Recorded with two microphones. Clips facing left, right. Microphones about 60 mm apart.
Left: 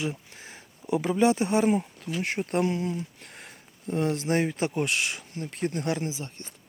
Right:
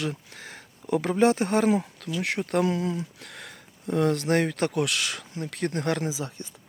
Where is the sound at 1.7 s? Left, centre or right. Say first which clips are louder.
Right 1 dB; right.